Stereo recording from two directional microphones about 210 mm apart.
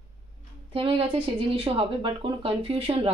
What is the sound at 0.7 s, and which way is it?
Speech, 25° right (ahead or behind).